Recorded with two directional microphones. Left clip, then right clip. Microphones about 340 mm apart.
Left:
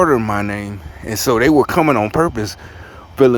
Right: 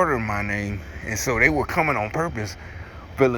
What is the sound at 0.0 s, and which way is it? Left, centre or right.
Speech, left.